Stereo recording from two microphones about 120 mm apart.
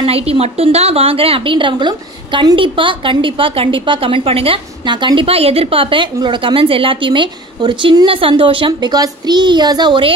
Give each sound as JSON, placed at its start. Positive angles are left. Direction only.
{"t": 0.0, "sound": "a woman's voice", "side_deg": -55}